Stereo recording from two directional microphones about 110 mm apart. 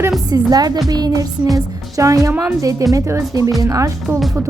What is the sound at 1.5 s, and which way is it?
A woman's voice, 30° right (ahead or behind).